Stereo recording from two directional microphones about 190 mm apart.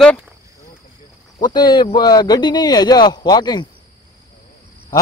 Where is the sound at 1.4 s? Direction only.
25° left (ahead or behind).